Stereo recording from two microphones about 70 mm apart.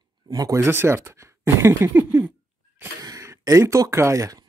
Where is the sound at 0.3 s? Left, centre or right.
Right.